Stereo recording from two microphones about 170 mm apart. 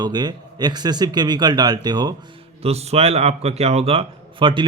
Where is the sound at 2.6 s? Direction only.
35° right (ahead or behind).